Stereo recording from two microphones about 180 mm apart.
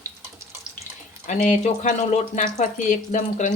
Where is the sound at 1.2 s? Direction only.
40° left (ahead or behind).